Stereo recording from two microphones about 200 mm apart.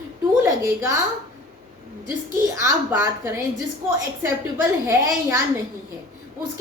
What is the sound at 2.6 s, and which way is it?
Speech, 15° right (ahead or behind).